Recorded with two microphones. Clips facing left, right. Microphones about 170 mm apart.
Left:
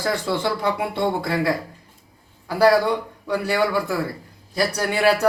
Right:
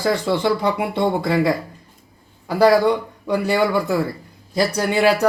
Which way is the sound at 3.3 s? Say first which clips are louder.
Right 3 dB; 20° right (ahead or behind).